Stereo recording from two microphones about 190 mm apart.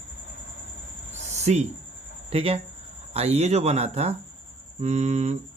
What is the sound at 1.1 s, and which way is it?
Cricket, 35° right (ahead or behind).